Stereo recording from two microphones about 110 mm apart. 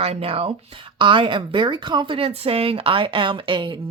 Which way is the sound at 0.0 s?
65° right (ahead or behind).